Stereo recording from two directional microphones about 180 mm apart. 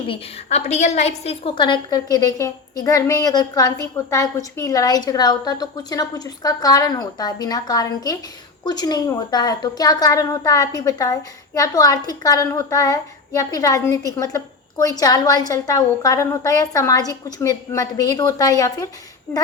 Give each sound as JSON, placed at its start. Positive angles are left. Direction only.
{"t": 0.4, "sound": "a woman's voice", "side_deg": 40}